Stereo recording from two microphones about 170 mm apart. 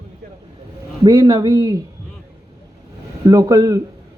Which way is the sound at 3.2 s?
20° right (ahead or behind).